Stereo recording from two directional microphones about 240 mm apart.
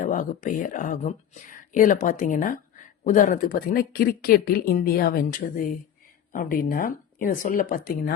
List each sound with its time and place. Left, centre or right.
0.0 s speech: left